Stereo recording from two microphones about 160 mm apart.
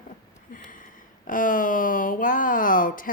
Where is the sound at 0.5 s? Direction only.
55° left (ahead or behind).